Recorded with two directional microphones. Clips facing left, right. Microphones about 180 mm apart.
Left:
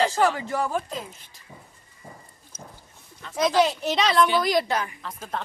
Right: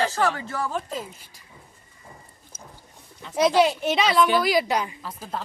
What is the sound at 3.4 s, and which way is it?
Speech, 5° right (ahead or behind).